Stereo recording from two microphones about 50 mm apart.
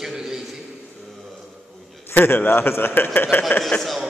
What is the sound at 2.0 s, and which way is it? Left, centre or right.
A man's voice, left.